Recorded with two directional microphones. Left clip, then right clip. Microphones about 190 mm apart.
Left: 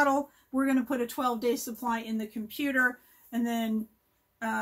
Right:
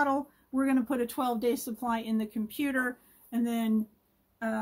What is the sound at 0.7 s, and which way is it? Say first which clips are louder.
Speech: right 1 dB; 35° right (ahead or behind).